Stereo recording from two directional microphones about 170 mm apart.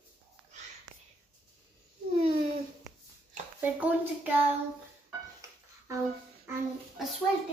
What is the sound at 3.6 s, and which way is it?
Speech, 10° right (ahead or behind).